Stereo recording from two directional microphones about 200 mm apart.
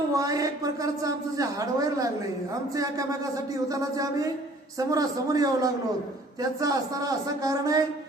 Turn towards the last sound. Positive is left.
turn(degrees=-15)  # may be behind; listen again after turning